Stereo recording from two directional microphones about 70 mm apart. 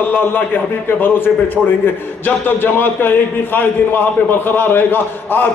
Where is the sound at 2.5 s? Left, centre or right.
Left.